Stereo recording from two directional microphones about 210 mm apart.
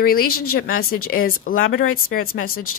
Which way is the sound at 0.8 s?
90° left.